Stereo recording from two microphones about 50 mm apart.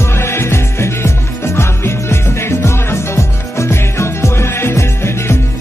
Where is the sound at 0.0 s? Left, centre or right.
Left.